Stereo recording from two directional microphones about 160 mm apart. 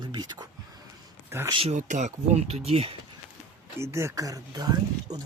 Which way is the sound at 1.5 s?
35° right (ahead or behind).